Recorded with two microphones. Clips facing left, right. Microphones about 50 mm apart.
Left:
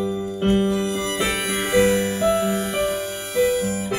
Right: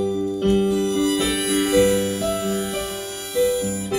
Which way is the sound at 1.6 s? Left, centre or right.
Left.